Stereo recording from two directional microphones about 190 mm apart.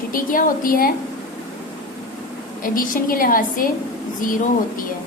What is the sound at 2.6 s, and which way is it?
A woman's voice, 45° left (ahead or behind).